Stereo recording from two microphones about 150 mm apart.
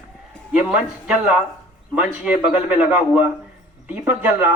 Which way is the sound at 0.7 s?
5° right (ahead or behind).